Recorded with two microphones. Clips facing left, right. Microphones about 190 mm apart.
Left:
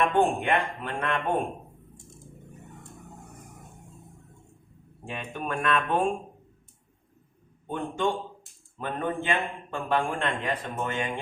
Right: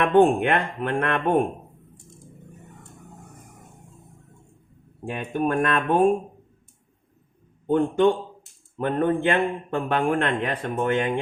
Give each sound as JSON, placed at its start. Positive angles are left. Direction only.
{"t": 0.0, "sound": "a man's voice", "side_deg": -60}
{"t": 5.0, "sound": "speech", "side_deg": -50}
{"t": 7.7, "sound": "a man's voice", "side_deg": -60}